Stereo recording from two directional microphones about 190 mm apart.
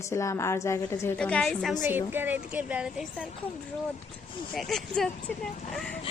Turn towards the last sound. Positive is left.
turn(degrees=5)  # may be behind; listen again after turning